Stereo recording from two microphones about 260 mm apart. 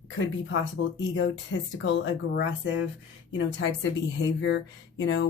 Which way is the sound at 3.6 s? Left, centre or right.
Left.